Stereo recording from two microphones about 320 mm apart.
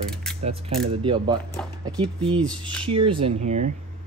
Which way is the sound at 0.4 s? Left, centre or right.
Centre.